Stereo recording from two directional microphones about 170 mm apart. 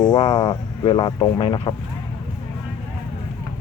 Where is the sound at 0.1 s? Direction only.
30° left (ahead or behind).